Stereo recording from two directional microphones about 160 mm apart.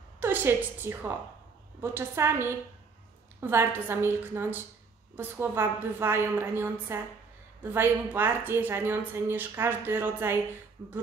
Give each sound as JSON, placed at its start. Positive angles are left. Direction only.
{"t": 0.2, "sound": "a woman's voice", "side_deg": -15}